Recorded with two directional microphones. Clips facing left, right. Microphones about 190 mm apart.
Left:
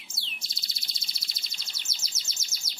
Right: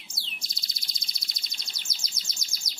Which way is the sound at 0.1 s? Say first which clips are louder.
Right 1 dB; 5° left (ahead or behind).